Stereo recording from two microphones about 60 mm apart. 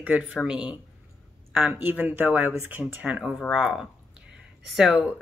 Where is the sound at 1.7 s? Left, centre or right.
Right.